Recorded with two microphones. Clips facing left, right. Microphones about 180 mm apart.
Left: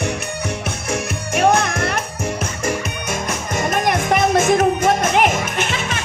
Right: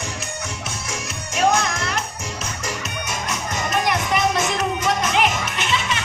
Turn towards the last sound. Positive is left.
turn(degrees=50)  # may be behind; listen again after turning